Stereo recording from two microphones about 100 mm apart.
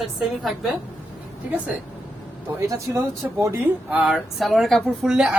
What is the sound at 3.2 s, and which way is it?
Speech, 20° right (ahead or behind).